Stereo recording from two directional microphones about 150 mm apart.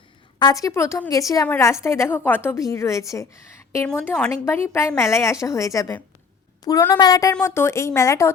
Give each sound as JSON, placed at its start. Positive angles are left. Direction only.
{"t": 0.3, "sound": "a woman's voice", "side_deg": 25}
{"t": 3.8, "sound": "speech", "side_deg": 5}
{"t": 4.4, "sound": "a woman's voice", "side_deg": 15}